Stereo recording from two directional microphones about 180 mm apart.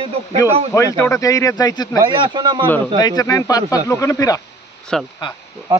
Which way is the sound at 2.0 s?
25° right (ahead or behind).